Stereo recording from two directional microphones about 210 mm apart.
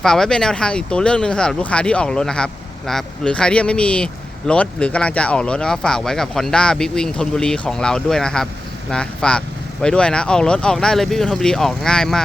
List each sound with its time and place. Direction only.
0.0 s speech: 5° left (ahead or behind)